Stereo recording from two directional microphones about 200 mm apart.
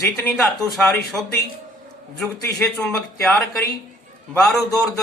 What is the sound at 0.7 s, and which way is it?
Speech, centre (ahead or behind).